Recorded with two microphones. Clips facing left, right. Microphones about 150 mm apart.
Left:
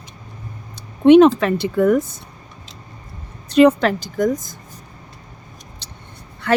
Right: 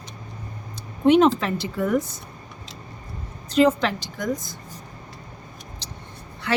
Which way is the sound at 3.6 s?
65° left (ahead or behind).